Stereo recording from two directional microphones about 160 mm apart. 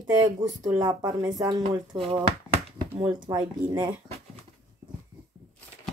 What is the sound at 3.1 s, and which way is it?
Speech, 25° right (ahead or behind).